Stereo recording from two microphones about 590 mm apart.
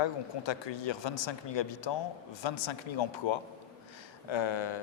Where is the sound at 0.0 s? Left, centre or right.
Left.